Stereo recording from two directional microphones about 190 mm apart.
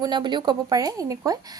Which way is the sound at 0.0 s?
25° right (ahead or behind).